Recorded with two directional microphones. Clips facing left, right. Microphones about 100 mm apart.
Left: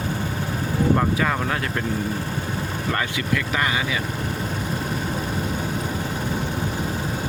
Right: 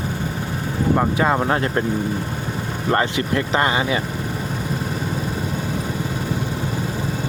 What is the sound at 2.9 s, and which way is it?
Speech, 35° right (ahead or behind).